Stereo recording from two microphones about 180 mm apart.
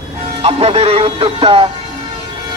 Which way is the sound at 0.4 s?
35° right (ahead or behind).